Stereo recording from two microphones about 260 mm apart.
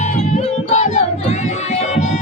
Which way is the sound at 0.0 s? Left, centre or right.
Left.